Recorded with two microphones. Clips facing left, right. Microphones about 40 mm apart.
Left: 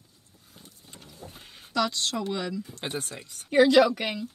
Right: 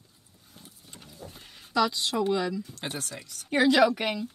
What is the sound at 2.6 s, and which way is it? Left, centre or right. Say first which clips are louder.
Speech: left 2 dB; left.